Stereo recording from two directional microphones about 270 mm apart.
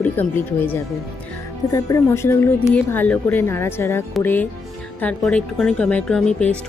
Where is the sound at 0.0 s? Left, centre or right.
Centre.